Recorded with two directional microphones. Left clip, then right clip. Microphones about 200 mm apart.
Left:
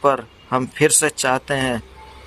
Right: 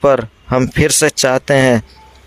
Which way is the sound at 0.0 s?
45° right (ahead or behind).